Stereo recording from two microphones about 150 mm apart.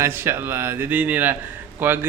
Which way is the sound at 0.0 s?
15° right (ahead or behind).